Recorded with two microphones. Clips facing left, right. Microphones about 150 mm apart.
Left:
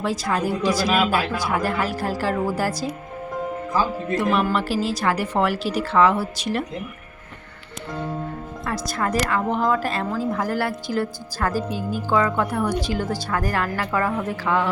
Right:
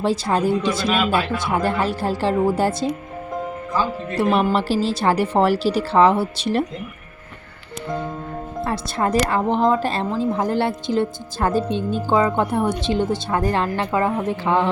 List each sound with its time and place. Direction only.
0.0 s speech: 30° right (ahead or behind)
4.2 s speech: 30° right (ahead or behind)
8.6 s speech: 30° right (ahead or behind)